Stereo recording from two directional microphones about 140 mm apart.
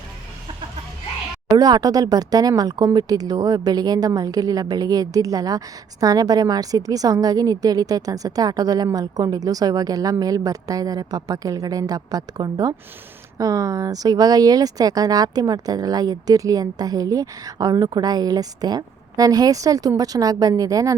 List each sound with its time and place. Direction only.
1.5 s speech: 30° right (ahead or behind)